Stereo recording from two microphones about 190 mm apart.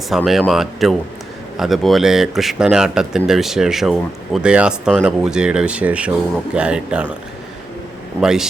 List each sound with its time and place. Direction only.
0.3 s speech: centre (ahead or behind)
8.2 s speech: 5° right (ahead or behind)